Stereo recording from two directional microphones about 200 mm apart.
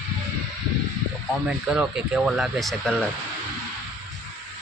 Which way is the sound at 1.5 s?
5° right (ahead or behind).